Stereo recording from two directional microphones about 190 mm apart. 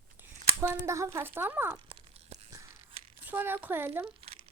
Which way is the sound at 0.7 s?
15° right (ahead or behind).